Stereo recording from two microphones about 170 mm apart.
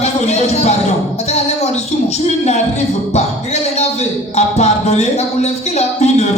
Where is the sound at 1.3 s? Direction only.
40° left (ahead or behind).